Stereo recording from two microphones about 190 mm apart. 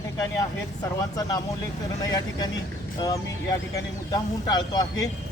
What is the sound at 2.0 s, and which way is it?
Speech, 20° left (ahead or behind).